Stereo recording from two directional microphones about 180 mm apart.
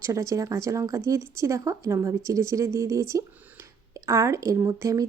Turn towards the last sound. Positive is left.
turn(degrees=-15)  # may be behind; listen again after turning